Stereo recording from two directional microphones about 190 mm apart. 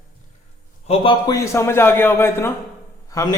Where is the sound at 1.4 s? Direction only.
15° left (ahead or behind).